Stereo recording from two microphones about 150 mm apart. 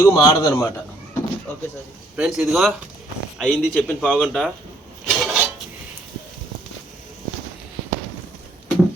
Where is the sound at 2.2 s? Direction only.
5° right (ahead or behind).